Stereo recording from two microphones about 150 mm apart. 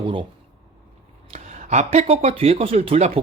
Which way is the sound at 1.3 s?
50° right (ahead or behind).